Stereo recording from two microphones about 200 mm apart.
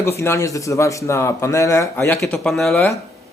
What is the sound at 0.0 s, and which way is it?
A man's voice, 15° left (ahead or behind).